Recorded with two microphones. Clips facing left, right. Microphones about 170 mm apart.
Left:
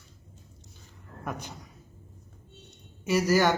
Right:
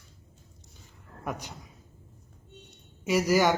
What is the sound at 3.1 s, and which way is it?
Speech, 10° right (ahead or behind).